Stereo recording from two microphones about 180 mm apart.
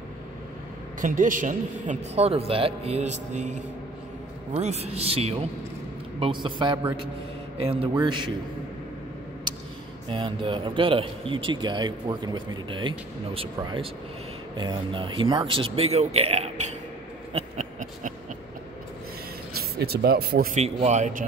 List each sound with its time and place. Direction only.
1.0 s a man's voice: 45° right (ahead or behind); by 8.3 s 25° right (ahead or behind)
10.0 s a man's voice: 25° right (ahead or behind)
17.3 s a sound: 35° right (ahead or behind)
19.8 s speech: 60° right (ahead or behind)
20.5 s a man's voice: 40° right (ahead or behind)